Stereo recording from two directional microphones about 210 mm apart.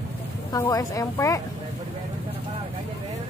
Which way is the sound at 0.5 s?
15° left (ahead or behind).